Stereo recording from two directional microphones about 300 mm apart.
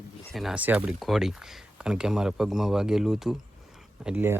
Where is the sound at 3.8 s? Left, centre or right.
Centre.